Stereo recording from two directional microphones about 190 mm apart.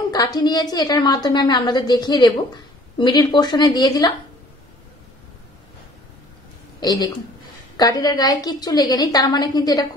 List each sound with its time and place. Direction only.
0.1 s a woman's voice: 20° left (ahead or behind)
6.8 s a woman's voice: 20° left (ahead or behind)